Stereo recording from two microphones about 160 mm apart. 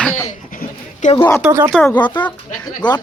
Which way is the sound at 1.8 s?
30° left (ahead or behind).